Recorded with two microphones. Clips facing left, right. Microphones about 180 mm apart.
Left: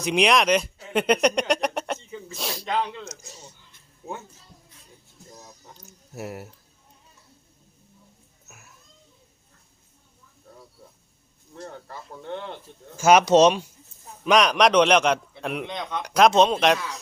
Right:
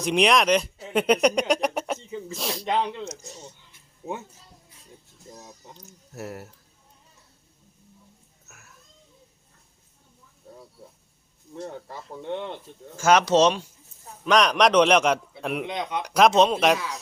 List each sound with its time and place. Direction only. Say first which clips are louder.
0.0 s speech: even; centre (ahead or behind)
2.6 s speech: right 1 dB; 20° right (ahead or behind)
6.1 s speech: left 1 dB; 10° left (ahead or behind)
13.0 s speech: left 3 dB; 10° left (ahead or behind)
14.3 s a man's voice: left 1 dB; 5° left (ahead or behind); by 16.1 s 10° right (ahead or behind)
16.1 s a man's voice: left 1 dB; centre (ahead or behind)